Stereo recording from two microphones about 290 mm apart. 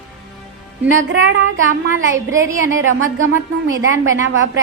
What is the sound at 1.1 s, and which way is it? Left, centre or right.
A woman's voice, right.